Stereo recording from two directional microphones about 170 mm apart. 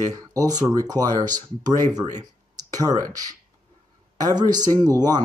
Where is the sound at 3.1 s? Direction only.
20° right (ahead or behind).